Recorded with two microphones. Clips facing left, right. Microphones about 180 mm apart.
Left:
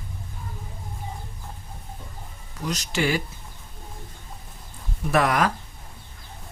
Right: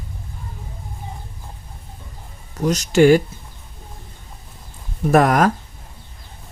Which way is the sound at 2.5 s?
45° right (ahead or behind).